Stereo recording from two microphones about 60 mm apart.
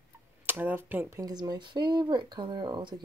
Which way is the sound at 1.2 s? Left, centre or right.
Right.